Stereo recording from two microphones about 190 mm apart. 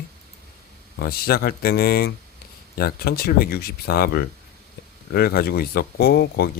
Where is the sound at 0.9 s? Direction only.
55° left (ahead or behind).